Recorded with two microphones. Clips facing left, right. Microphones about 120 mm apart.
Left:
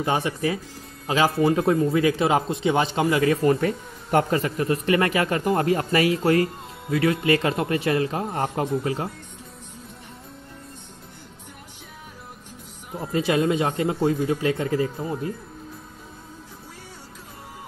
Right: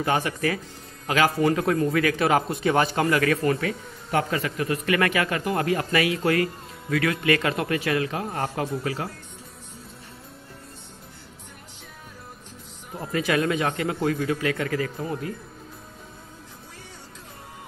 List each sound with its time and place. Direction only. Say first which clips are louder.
0.0 s speech: left 1 dB; 20° left (ahead or behind)
3.4 s speech: left 4 dB; 40° left (ahead or behind)
13.1 s speech: left 2 dB; 25° left (ahead or behind)
15.0 s speech: left 1 dB; 15° left (ahead or behind)